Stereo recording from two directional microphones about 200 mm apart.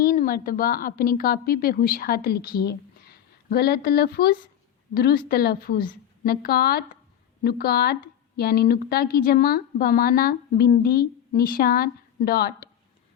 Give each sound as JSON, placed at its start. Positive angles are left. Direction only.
{"t": 0.0, "sound": "a woman's voice", "side_deg": 45}